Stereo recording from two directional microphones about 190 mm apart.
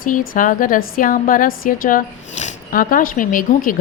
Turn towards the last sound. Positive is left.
turn(degrees=45)  # may be behind; listen again after turning